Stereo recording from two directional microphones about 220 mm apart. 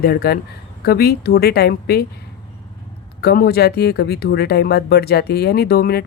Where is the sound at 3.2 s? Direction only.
45° left (ahead or behind).